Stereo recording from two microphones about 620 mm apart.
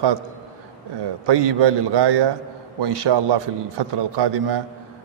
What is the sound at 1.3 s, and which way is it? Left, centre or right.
A man's voice, right.